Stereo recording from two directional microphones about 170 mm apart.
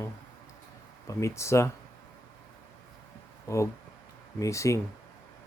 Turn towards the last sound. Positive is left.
turn(degrees=15)  # may be behind; listen again after turning